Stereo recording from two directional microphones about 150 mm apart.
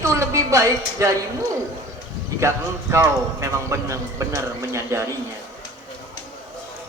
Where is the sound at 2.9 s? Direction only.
20° right (ahead or behind).